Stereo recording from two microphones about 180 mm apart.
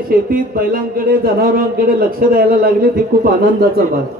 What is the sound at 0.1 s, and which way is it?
Speech, 55° right (ahead or behind).